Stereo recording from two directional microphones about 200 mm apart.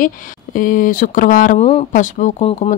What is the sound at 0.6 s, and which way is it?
Speech, 45° left (ahead or behind).